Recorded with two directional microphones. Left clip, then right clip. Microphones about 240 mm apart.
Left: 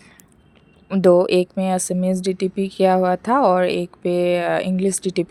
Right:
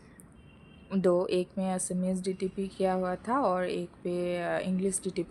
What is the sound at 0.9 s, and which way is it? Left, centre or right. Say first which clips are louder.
Speech: left 13 dB; left.